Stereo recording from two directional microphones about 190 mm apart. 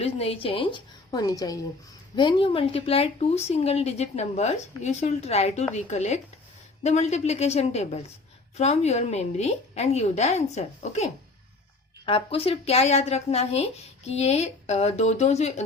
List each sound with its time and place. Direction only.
0.0 s a woman's voice: 30° left (ahead or behind)